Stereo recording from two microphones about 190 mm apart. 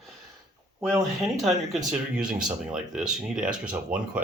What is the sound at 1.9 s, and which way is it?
Speech, 5° right (ahead or behind).